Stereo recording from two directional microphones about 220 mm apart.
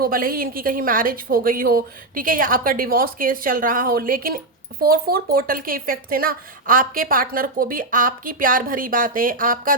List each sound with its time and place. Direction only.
0.0 s a woman's voice: 40° right (ahead or behind)